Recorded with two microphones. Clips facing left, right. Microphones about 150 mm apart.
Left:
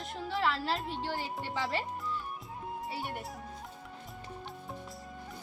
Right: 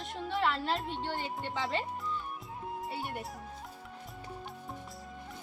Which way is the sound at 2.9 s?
Centre (ahead or behind).